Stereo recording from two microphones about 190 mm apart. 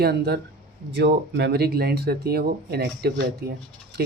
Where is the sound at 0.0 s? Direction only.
55° right (ahead or behind).